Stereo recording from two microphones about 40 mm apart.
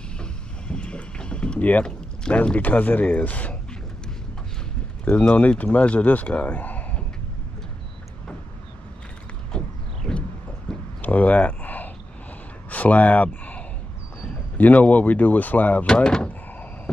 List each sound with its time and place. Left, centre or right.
0.2 s boat: left
1.6 s speech: left
5.1 s speech: left
9.5 s a sound: left
11.0 s a sound: left
14.6 s speech: left
15.9 s speech: centre